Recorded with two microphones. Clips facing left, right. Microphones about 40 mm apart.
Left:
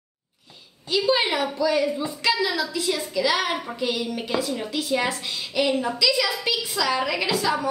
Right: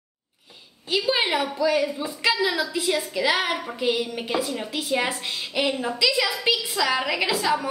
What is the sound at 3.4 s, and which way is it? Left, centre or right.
A woman's voice, centre.